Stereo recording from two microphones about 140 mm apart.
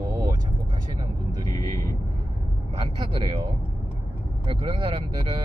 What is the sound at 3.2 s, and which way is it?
Speech, 30° right (ahead or behind).